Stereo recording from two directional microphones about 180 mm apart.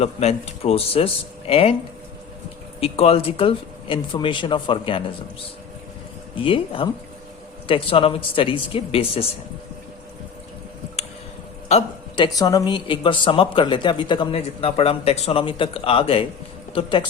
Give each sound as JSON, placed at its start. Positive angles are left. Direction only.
{"t": 0.0, "sound": "speech", "side_deg": 35}
{"t": 2.8, "sound": "a woman's voice", "side_deg": 35}
{"t": 6.3, "sound": "a woman's voice", "side_deg": 30}
{"t": 11.7, "sound": "a woman's voice", "side_deg": 25}